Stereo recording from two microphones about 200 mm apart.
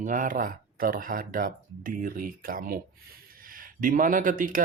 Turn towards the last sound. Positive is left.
turn(degrees=-40)  # may be behind; listen again after turning